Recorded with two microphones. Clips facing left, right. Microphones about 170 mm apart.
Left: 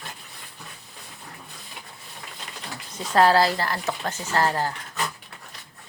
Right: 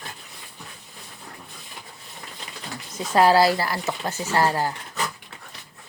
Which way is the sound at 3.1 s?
10° right (ahead or behind).